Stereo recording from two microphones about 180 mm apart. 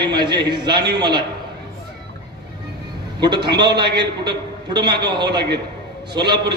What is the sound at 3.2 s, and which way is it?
A man's voice, 25° right (ahead or behind).